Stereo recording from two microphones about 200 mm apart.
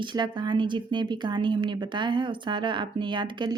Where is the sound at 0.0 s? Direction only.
20° right (ahead or behind).